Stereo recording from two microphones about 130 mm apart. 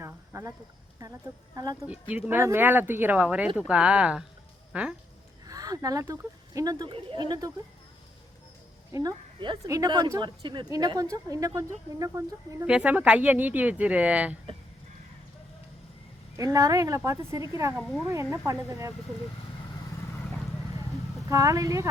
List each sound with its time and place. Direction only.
0.0 s a sound: 20° right (ahead or behind)
1.5 s a woman's voice: 25° right (ahead or behind)
1.9 s speech: 10° right (ahead or behind)
5.5 s speech: 25° right (ahead or behind)
6.9 s speech: 40° right (ahead or behind)
8.9 s a woman's voice: 25° right (ahead or behind)
12.6 s speech: 10° right (ahead or behind)
16.4 s a woman's voice: 25° right (ahead or behind)
21.2 s a woman's voice: 25° right (ahead or behind)